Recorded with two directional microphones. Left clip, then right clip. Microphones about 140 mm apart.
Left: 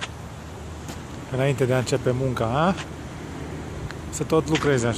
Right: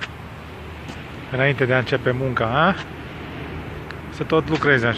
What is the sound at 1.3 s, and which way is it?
Speech, 15° left (ahead or behind).